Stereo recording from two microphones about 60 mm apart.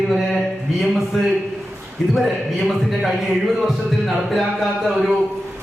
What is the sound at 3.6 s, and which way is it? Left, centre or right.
A man's voice, centre.